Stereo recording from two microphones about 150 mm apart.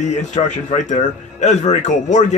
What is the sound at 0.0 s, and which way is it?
A man's voice, 50° left (ahead or behind).